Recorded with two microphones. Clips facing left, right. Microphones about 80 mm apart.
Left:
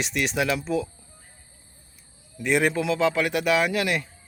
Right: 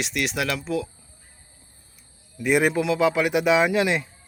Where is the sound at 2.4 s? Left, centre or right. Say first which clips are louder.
Right 2 dB; centre.